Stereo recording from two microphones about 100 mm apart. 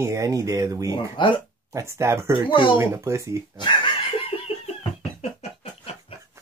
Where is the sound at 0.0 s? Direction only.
30° right (ahead or behind).